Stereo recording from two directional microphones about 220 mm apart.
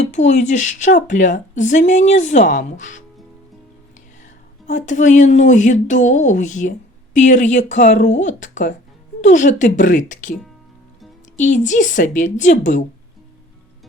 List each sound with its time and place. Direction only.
0.0 s speech: 35° left (ahead or behind)
4.2 s speech: 35° left (ahead or behind)
11.3 s speech: 35° left (ahead or behind)